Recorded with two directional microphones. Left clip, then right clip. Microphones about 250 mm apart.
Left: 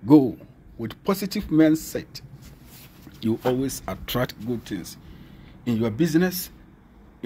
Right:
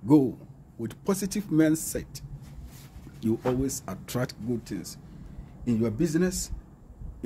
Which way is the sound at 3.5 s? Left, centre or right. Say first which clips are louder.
Left 4 dB; centre.